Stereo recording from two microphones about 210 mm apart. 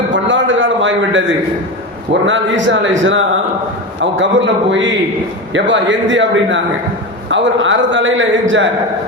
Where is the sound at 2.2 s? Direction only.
60° right (ahead or behind).